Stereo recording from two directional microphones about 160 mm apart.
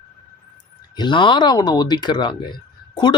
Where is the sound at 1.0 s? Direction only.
30° left (ahead or behind).